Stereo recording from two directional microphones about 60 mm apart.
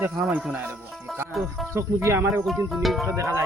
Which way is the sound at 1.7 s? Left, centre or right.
Right.